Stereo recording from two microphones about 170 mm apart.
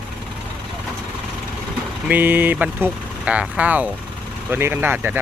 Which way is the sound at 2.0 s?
10° right (ahead or behind).